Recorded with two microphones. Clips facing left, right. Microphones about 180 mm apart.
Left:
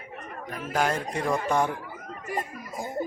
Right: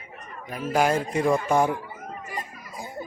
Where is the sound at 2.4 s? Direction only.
45° left (ahead or behind).